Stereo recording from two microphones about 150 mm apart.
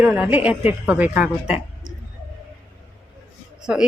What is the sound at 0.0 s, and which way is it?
Speech, 10° right (ahead or behind).